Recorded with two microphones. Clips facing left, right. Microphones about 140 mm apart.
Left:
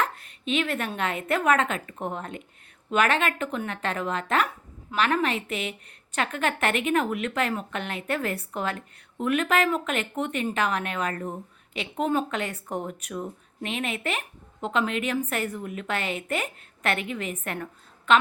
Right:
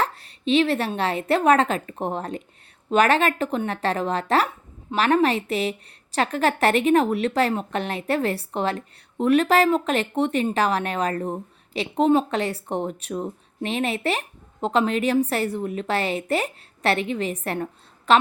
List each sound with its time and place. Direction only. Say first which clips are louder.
0.0 s a woman's voice: right 4 dB; 30° right (ahead or behind)